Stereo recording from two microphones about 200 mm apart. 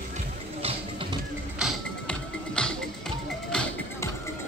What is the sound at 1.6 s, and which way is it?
Music, 5° left (ahead or behind).